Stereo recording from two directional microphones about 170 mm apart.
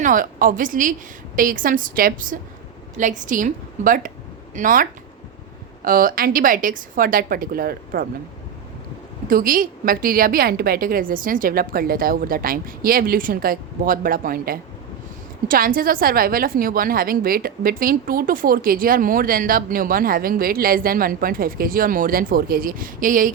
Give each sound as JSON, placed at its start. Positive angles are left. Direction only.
{"t": 0.0, "sound": "a woman's voice", "side_deg": -50}
{"t": 9.3, "sound": "a woman's voice", "side_deg": -55}